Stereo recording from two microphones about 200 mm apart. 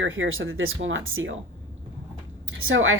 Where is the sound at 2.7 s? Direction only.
90° right.